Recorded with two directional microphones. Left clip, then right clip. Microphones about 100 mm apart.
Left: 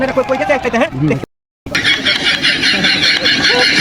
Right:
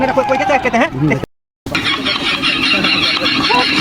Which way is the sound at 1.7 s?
40° left (ahead or behind).